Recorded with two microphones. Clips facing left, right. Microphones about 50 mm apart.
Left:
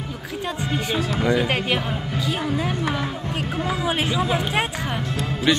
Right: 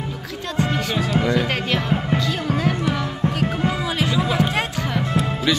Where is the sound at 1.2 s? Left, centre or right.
Centre.